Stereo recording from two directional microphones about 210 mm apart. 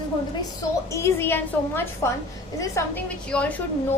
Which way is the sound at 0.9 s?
15° left (ahead or behind).